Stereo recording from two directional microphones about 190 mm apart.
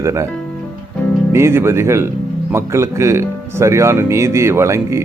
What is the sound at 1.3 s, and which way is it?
Speech, 15° right (ahead or behind).